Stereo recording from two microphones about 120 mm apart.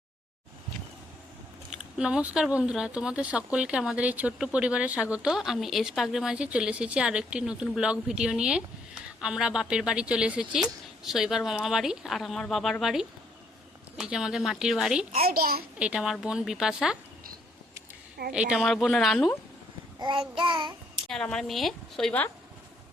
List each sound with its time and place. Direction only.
1.7 s speech: 5° right (ahead or behind)
18.3 s speech: 10° right (ahead or behind)
18.6 s speech: centre (ahead or behind)
20.0 s child singing: 45° right (ahead or behind)
21.1 s speech: 5° left (ahead or behind)